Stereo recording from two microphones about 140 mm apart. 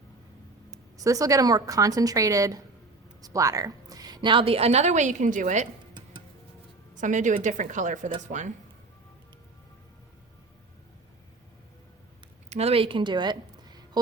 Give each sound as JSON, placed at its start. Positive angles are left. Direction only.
{"t": 0.9, "sound": "a woman's voice", "side_deg": -25}
{"t": 6.9, "sound": "a woman's voice", "side_deg": -65}
{"t": 12.5, "sound": "speech", "side_deg": -50}